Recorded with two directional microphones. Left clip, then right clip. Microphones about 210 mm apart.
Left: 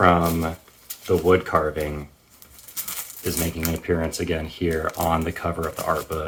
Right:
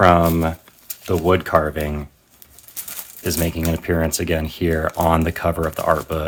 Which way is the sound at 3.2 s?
45° right (ahead or behind).